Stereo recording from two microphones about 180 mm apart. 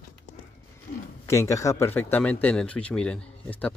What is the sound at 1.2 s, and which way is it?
Speech, 15° left (ahead or behind).